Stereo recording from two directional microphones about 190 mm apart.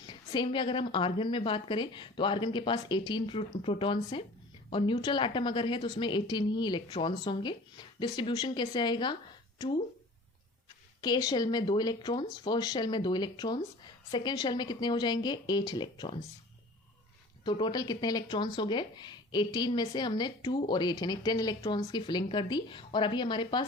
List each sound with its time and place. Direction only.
0.0 s speech: 25° left (ahead or behind)
11.0 s speech: 20° left (ahead or behind)
17.4 s speech: 25° left (ahead or behind)